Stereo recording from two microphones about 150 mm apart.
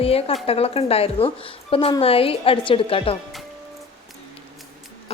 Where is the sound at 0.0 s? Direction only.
40° left (ahead or behind).